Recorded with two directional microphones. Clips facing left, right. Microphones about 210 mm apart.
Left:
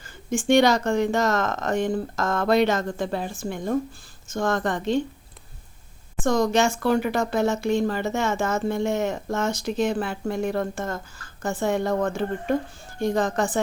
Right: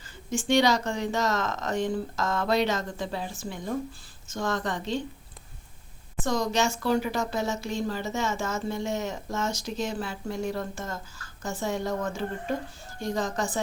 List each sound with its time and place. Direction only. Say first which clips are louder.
0.0 s speech: left 5 dB; 50° left (ahead or behind)
6.2 s speech: left 6 dB; 50° left (ahead or behind)